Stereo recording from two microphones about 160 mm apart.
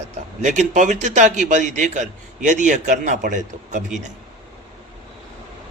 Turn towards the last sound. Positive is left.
turn(degrees=-50)  # may be behind; listen again after turning